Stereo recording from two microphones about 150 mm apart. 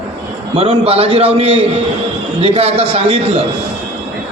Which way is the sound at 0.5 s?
40° right (ahead or behind).